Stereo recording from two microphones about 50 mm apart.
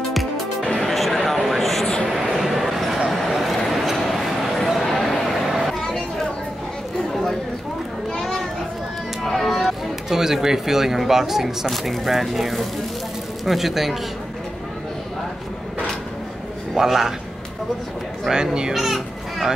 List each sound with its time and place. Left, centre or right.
0.7 s a sound: centre
8.1 s children playing: centre
9.2 s a sound: centre
10.0 s a man's voice: centre
16.7 s a man's voice: centre
18.3 s a child's voice: centre